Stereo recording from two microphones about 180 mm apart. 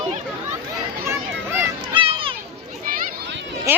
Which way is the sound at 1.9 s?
30° right (ahead or behind).